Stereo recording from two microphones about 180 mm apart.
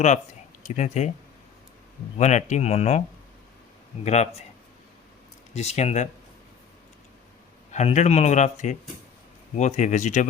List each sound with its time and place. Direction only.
0.8 s a man's voice: 40° left (ahead or behind)
2.1 s a man's voice: 40° left (ahead or behind)
4.0 s a man's voice: 40° left (ahead or behind)
5.5 s a man's voice: 40° left (ahead or behind)
7.7 s a man's voice: 40° left (ahead or behind)